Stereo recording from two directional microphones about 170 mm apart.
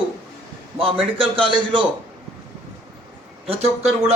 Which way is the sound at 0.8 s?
35° right (ahead or behind).